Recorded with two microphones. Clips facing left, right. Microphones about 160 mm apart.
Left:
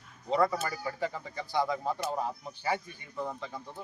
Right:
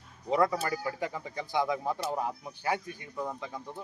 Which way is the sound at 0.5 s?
10° right (ahead or behind).